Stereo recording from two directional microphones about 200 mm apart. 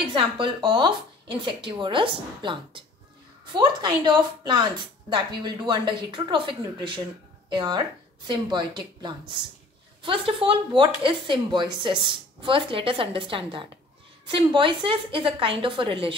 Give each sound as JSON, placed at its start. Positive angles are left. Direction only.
{"t": 0.1, "sound": "speech", "side_deg": -25}